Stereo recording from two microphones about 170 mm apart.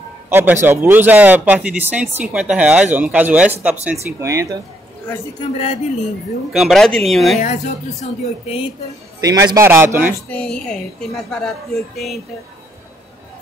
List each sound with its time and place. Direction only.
0.3 s speech: 15° right (ahead or behind)
5.4 s speech: 35° left (ahead or behind)
6.5 s a woman's voice: centre (ahead or behind)
7.3 s speech: 45° left (ahead or behind)
9.2 s speech: 20° right (ahead or behind)
10.1 s a woman's voice: 10° left (ahead or behind)